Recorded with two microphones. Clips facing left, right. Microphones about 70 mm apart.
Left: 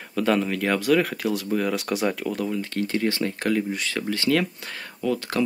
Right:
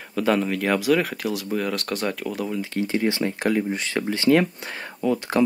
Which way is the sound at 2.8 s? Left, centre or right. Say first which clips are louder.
Right 2 dB; centre.